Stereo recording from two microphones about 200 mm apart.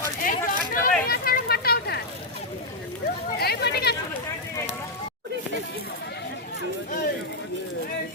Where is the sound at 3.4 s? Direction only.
50° left (ahead or behind).